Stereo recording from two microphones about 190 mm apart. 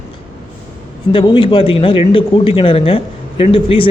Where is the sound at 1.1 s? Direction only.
25° left (ahead or behind).